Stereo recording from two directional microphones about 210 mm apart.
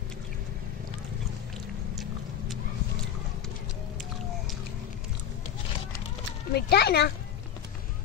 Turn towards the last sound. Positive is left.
turn(degrees=50)  # may be behind; listen again after turning